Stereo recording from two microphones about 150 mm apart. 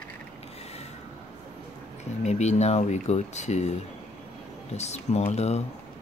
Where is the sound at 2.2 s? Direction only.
50° left (ahead or behind).